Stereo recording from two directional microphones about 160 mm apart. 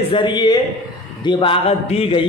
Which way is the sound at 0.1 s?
30° left (ahead or behind).